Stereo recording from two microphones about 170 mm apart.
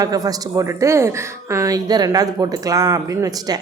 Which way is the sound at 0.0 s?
20° right (ahead or behind).